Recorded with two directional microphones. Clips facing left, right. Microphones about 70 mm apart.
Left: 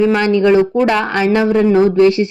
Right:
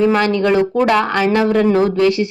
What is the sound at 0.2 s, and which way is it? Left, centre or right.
Speech, left.